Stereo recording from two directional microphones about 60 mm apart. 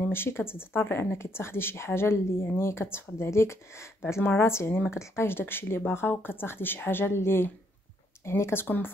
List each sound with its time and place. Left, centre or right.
0.0 s speech: left